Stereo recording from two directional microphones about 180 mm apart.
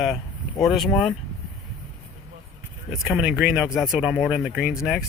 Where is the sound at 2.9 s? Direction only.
Centre (ahead or behind).